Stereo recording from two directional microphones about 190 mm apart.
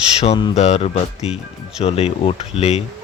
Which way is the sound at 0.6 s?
35° left (ahead or behind).